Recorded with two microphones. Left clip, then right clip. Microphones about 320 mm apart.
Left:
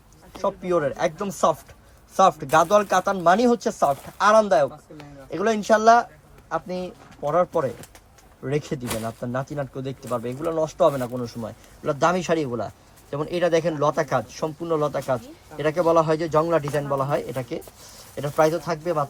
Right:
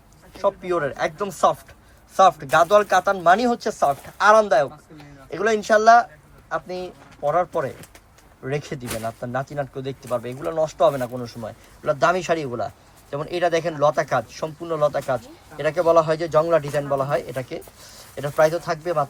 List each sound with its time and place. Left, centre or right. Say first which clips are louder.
0.3 s speech: right 1 dB; left